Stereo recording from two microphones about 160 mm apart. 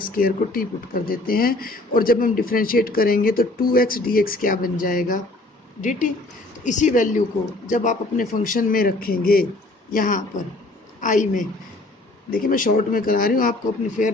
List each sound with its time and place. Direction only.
0.0 s a man's voice: 65° left (ahead or behind)
9.9 s a man's voice: 55° left (ahead or behind)